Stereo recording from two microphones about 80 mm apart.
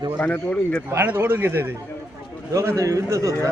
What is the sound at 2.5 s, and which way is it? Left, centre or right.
Speech, right.